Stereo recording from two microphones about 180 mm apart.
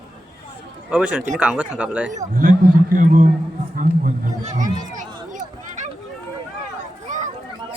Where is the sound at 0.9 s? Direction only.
5° right (ahead or behind).